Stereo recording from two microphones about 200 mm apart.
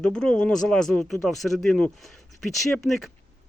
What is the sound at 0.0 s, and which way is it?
Speech, 5° left (ahead or behind).